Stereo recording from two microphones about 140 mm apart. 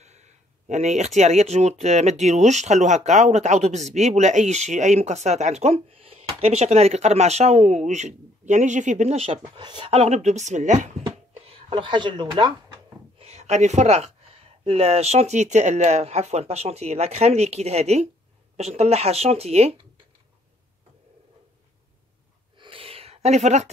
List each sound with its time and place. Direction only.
0.0 s speech: 55° right (ahead or behind)
11.4 s speech: 40° right (ahead or behind)
13.2 s speech: 50° right (ahead or behind)
22.6 s a sound: 40° right (ahead or behind)